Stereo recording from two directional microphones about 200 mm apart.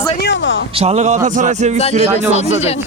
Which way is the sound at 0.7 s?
30° right (ahead or behind).